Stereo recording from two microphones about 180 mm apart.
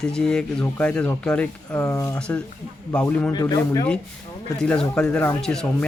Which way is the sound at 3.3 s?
20° left (ahead or behind).